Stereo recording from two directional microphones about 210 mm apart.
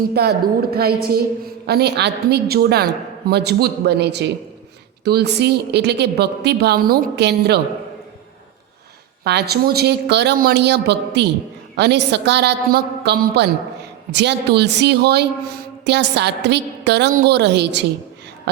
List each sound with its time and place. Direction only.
0.1 s a woman's voice: 50° right (ahead or behind)
9.2 s a woman's voice: 50° right (ahead or behind)